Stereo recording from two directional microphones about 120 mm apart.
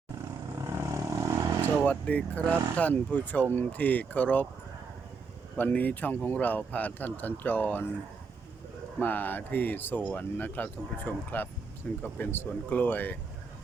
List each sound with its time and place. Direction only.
0.7 s vehicle: 25° right (ahead or behind)
1.6 s speech: 10° left (ahead or behind)
5.5 s speech: 15° left (ahead or behind)
9.0 s speech: 15° left (ahead or behind)